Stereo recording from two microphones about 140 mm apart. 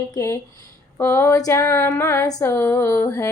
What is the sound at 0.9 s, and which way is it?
Female singing, 15° left (ahead or behind).